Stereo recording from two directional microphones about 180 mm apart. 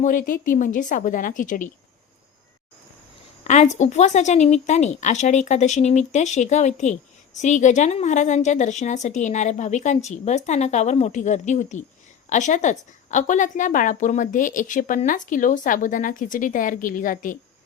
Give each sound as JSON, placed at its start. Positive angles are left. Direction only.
{"t": 0.0, "sound": "a woman's voice", "side_deg": 50}
{"t": 3.4, "sound": "a woman's voice", "side_deg": 40}